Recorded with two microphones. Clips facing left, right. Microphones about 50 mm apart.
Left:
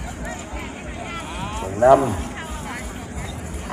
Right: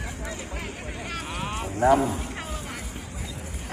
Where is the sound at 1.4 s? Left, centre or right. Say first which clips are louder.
Left 1 dB; centre.